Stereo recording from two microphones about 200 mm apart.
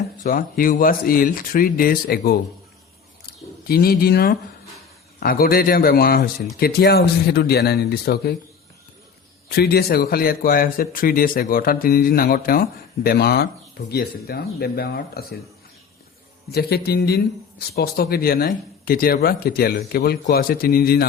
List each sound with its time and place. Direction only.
0.2 s a man's voice: 45° left (ahead or behind)
3.2 s a sound: 50° left (ahead or behind)
5.2 s a man's voice: 45° left (ahead or behind)
9.5 s a man's voice: 50° left (ahead or behind)
16.5 s a man's voice: 50° left (ahead or behind)